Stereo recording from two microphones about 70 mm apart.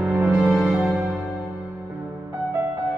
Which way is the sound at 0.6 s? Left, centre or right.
Centre.